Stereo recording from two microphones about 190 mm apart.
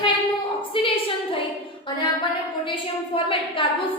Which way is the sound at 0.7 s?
30° left (ahead or behind).